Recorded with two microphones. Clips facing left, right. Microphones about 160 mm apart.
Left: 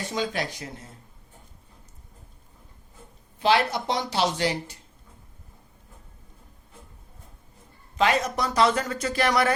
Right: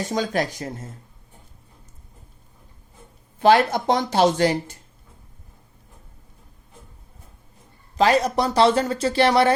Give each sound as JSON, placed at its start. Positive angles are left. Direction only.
{"t": 0.1, "sound": "speech", "side_deg": -45}
{"t": 3.4, "sound": "speech", "side_deg": -50}
{"t": 7.9, "sound": "speech", "side_deg": -35}